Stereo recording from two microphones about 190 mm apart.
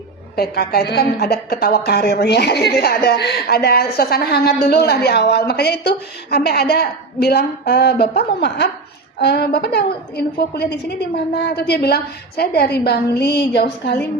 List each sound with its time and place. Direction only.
0.3 s a woman's voice: 55° left (ahead or behind)